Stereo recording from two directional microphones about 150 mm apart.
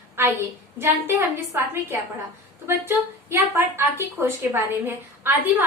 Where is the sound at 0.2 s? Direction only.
15° right (ahead or behind).